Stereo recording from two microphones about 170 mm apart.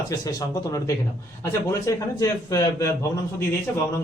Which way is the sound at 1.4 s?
20° left (ahead or behind).